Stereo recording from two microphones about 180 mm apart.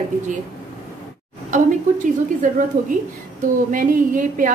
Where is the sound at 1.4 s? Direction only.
45° right (ahead or behind).